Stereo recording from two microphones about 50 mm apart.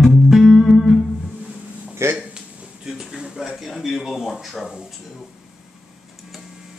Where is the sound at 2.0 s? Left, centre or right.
Right.